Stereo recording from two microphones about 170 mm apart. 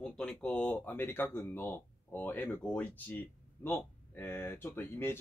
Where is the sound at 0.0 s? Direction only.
5° left (ahead or behind).